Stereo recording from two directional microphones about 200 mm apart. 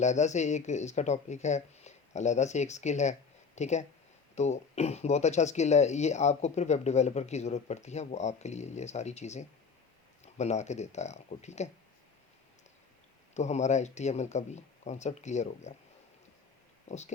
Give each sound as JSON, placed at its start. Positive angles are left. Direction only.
{"t": 0.0, "sound": "speech", "side_deg": 35}
{"t": 13.3, "sound": "speech", "side_deg": 35}
{"t": 16.9, "sound": "speech", "side_deg": 35}